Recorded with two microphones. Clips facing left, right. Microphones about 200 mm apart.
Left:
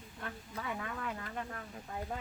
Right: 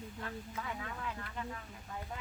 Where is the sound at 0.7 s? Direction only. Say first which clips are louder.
Left 2 dB; 50° left (ahead or behind).